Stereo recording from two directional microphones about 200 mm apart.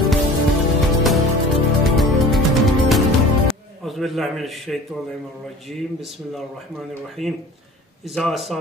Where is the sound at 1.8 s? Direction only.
Centre (ahead or behind).